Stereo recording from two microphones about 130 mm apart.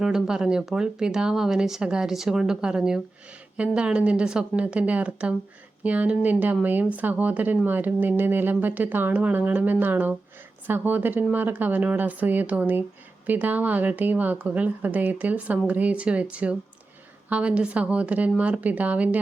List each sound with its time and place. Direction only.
0.0 s speech: 5° right (ahead or behind)